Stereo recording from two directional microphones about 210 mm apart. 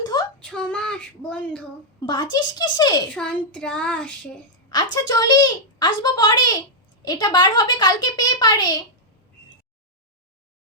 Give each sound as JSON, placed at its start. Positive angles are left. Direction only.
{"t": 0.0, "sound": "child singing", "side_deg": 20}
{"t": 0.3, "sound": "a sound", "side_deg": 5}
{"t": 2.0, "sound": "a woman's voice", "side_deg": 20}
{"t": 3.2, "sound": "child singing", "side_deg": 5}
{"t": 4.7, "sound": "a woman's voice", "side_deg": 20}